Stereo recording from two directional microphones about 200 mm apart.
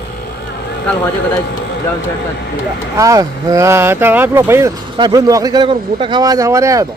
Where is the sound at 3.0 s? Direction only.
15° right (ahead or behind).